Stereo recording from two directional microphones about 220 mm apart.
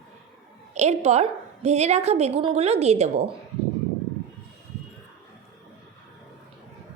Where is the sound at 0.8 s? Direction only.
30° right (ahead or behind).